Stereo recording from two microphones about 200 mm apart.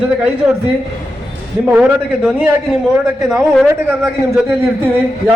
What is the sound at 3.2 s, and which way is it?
Speech, centre (ahead or behind).